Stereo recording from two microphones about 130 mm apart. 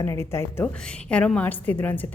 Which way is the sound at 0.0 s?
20° left (ahead or behind).